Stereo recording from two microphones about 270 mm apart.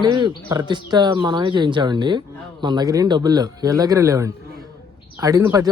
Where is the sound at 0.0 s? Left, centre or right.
Centre.